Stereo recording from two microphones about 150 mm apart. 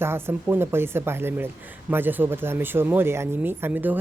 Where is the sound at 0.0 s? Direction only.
15° right (ahead or behind).